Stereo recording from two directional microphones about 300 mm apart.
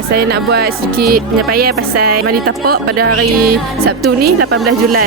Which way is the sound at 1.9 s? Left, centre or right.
Right.